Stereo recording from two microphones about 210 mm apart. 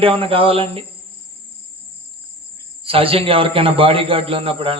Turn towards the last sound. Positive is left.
turn(degrees=-25)  # may be behind; listen again after turning